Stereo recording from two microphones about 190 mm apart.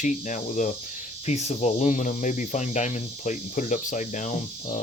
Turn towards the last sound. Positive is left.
turn(degrees=40)  # may be behind; listen again after turning